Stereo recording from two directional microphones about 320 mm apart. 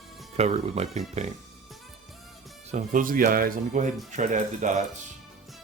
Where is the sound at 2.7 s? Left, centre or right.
Right.